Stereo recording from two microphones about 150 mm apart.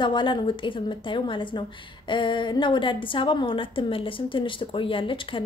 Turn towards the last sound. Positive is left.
turn(degrees=35)  # may be behind; listen again after turning